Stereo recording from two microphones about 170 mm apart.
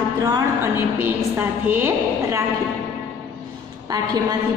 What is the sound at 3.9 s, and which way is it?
Speech, 20° right (ahead or behind).